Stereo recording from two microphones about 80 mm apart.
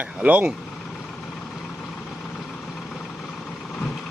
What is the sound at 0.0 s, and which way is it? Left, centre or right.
Speech, centre.